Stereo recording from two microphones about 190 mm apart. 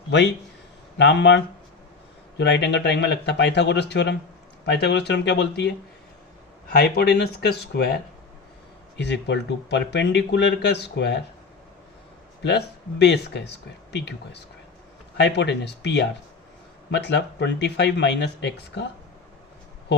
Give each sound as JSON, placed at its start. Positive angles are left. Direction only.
{"t": 0.1, "sound": "speech", "side_deg": 65}
{"t": 2.4, "sound": "speech", "side_deg": 65}
{"t": 6.7, "sound": "speech", "side_deg": 60}
{"t": 9.0, "sound": "speech", "side_deg": 65}
{"t": 12.4, "sound": "speech", "side_deg": 65}